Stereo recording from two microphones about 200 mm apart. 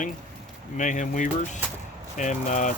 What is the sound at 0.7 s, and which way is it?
Speech, 40° left (ahead or behind).